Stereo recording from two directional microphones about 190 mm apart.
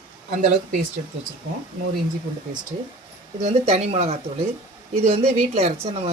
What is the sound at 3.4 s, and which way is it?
Speech, 35° right (ahead or behind).